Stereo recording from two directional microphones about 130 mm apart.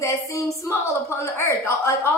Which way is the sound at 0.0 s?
25° left (ahead or behind).